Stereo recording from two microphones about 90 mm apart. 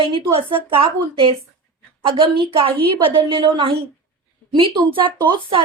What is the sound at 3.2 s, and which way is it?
Speech, 65° right (ahead or behind).